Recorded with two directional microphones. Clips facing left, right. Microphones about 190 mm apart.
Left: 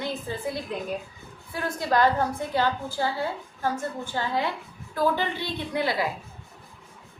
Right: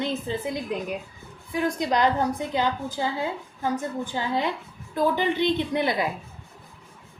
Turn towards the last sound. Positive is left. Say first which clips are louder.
# right 2 dB
turn(degrees=-20)  # may be behind; listen again after turning